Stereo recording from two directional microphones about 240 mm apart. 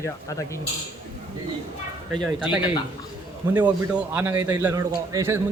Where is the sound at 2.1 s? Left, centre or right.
Centre.